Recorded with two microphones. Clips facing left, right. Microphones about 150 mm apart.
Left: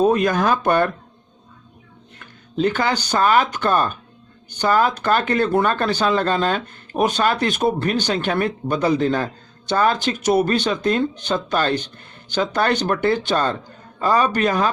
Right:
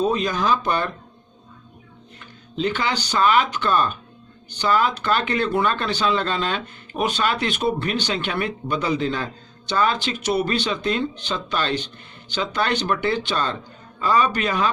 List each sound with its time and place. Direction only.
0.0 s speech: 55° left (ahead or behind)
2.1 s a man's voice: 45° left (ahead or behind)